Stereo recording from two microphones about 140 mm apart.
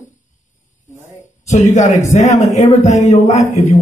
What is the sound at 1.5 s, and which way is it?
A man's voice, 60° left (ahead or behind).